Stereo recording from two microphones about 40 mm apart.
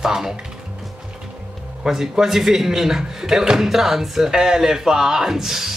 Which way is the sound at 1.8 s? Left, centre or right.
Centre.